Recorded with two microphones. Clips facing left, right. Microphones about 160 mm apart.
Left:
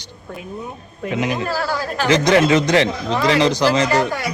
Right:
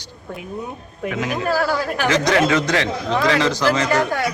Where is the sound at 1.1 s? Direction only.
20° left (ahead or behind).